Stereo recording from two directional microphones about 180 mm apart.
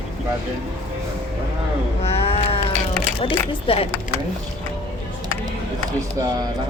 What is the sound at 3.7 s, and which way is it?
Speech, 30° left (ahead or behind).